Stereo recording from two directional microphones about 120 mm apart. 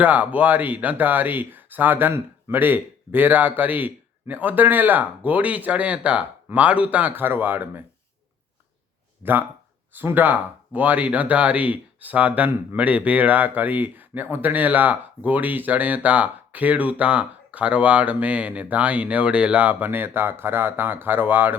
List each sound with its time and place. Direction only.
0.0 s speech: 15° right (ahead or behind)
9.2 s speech: 15° right (ahead or behind)